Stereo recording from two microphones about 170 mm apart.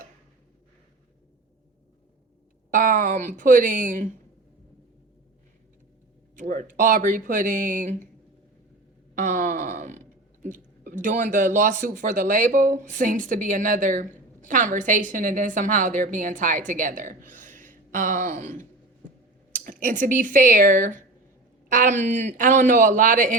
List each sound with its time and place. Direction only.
2.6 s speech: 50° right (ahead or behind)
6.3 s speech: 50° right (ahead or behind)
9.1 s a sound: 50° right (ahead or behind)
10.4 s speech: 50° right (ahead or behind)
17.3 s a sound: 50° right (ahead or behind)
19.5 s speech: 50° right (ahead or behind)